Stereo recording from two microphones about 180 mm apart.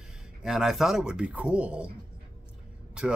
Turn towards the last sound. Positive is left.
turn(degrees=-5)  # may be behind; listen again after turning